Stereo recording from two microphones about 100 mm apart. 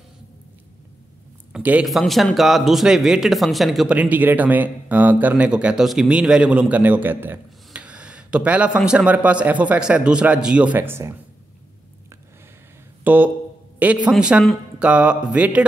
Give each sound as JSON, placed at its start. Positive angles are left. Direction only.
{"t": 1.5, "sound": "a man's voice", "side_deg": -15}
{"t": 1.9, "sound": "speech", "side_deg": 0}
{"t": 3.9, "sound": "a man's voice", "side_deg": -15}
{"t": 13.0, "sound": "a man's voice", "side_deg": -20}